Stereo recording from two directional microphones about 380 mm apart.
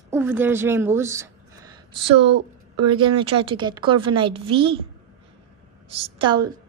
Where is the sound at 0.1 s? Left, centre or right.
Centre.